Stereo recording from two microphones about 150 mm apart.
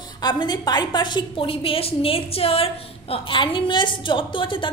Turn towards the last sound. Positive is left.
turn(degrees=35)  # may be behind; listen again after turning